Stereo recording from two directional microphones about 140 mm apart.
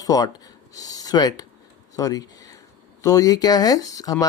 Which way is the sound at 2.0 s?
25° left (ahead or behind).